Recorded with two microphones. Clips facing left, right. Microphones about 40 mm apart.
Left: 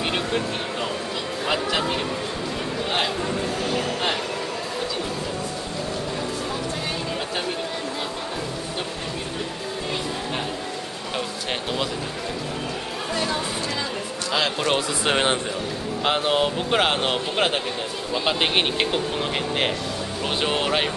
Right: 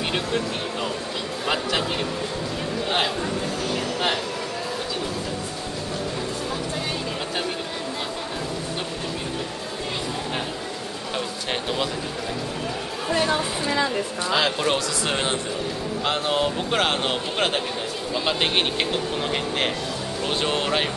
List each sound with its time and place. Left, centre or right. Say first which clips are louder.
0.1 s music: even; centre
1.4 s a sound: left 1 dB; centre
13.1 s music: right 4 dB; centre
14.3 s run: right 1 dB; centre
14.7 s speech: left 2 dB; left